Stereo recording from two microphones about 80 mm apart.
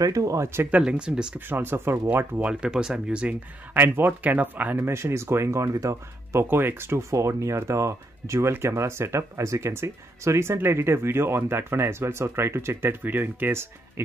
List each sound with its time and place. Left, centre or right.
0.0 s speech: right
0.7 s speech: centre
1.5 s speech: right
2.3 s speech: centre
3.8 s speech: right
6.4 s speech: right